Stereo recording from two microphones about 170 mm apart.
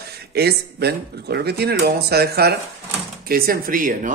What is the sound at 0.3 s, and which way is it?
Speech, 70° right (ahead or behind).